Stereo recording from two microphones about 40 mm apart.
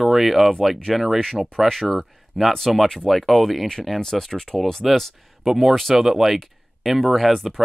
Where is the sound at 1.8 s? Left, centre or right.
Centre.